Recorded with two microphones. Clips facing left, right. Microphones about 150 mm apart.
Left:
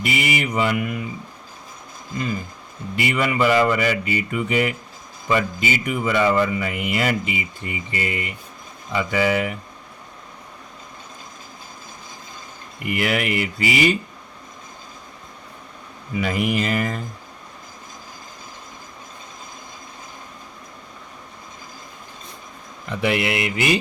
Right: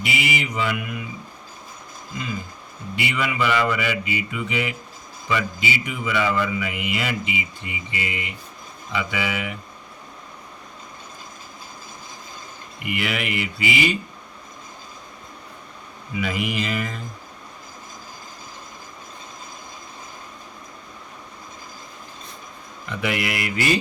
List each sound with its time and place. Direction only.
0.0 s speech: 50° left (ahead or behind)
2.9 s speech: 45° left (ahead or behind)
12.8 s speech: 45° left (ahead or behind)
16.1 s speech: 45° left (ahead or behind)
23.0 s speech: 30° left (ahead or behind)